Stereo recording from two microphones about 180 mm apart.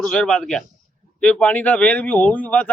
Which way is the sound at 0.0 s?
5° left (ahead or behind).